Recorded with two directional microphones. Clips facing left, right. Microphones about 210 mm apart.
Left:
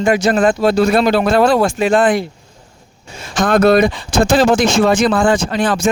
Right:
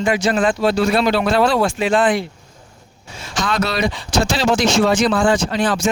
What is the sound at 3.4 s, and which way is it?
Speech, 55° left (ahead or behind).